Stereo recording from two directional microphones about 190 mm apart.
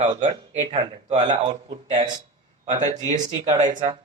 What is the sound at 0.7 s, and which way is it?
Speech, 30° right (ahead or behind).